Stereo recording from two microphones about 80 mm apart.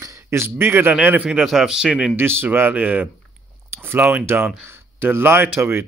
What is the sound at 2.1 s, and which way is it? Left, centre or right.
Speech, right.